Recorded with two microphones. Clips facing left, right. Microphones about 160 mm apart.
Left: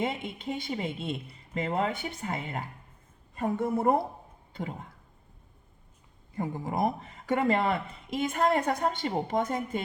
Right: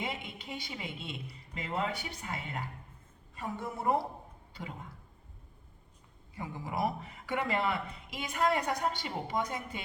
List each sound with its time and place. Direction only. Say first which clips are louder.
0.0 s speech: left 7 dB; 50° left (ahead or behind)
6.3 s speech: left 6 dB; 50° left (ahead or behind)